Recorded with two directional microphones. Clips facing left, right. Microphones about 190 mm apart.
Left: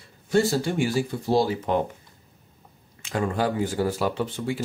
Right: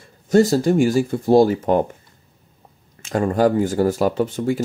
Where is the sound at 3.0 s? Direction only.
45° right (ahead or behind).